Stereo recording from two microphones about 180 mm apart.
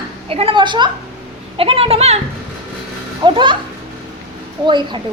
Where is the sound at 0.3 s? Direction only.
30° right (ahead or behind).